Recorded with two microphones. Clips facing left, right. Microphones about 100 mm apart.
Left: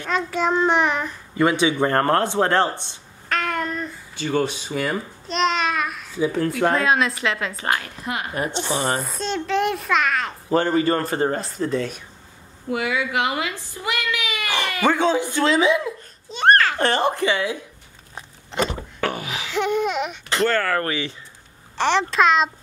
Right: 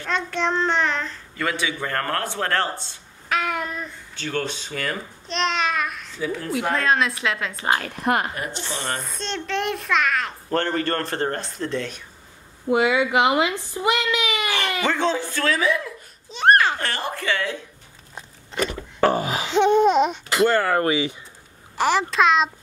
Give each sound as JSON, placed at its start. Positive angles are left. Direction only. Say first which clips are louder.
{"t": 0.1, "sound": "a child's voice", "louder": "left 2 dB", "side_deg": 5}
{"t": 3.3, "sound": "a sound", "louder": "left 1 dB", "side_deg": -5}
{"t": 6.8, "sound": "a child's voice", "louder": "left 1 dB", "side_deg": 5}
{"t": 7.7, "sound": "a woman's voice", "louder": "right 10 dB", "side_deg": -55}
{"t": 8.4, "sound": "a child's voice", "louder": "left 6 dB", "side_deg": 25}
{"t": 8.7, "sound": "a child's voice", "louder": "left 5 dB", "side_deg": 15}
{"t": 12.6, "sound": "a woman's voice", "louder": "right 5 dB", "side_deg": -20}
{"t": 14.8, "sound": "a child's voice", "louder": "left 5 dB", "side_deg": 10}
{"t": 16.3, "sound": "babbling", "louder": "left 1 dB", "side_deg": 0}
{"t": 16.7, "sound": "a child's voice", "louder": "left 7 dB", "side_deg": 25}
{"t": 18.9, "sound": "a sound", "louder": "right 7 dB", "side_deg": -35}
{"t": 19.5, "sound": "babbling", "louder": "right 6 dB", "side_deg": -25}
{"t": 20.2, "sound": "speech", "louder": "right 2 dB", "side_deg": -10}
{"t": 21.7, "sound": "a child's voice", "louder": "left 1 dB", "side_deg": -5}